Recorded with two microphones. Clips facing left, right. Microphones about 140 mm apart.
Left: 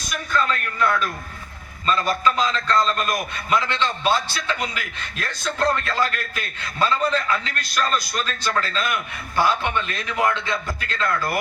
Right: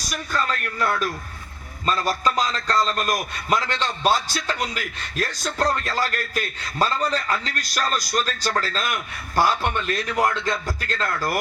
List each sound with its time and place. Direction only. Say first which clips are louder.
0.3 s a man's voice: left 3 dB; 40° right (ahead or behind)